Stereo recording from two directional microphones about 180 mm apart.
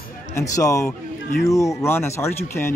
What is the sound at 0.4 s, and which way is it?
Speech, 15° left (ahead or behind).